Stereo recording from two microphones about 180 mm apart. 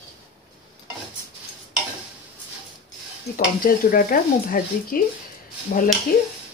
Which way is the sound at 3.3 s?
50° left (ahead or behind).